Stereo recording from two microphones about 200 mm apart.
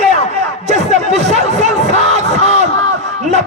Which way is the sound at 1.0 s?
35° right (ahead or behind).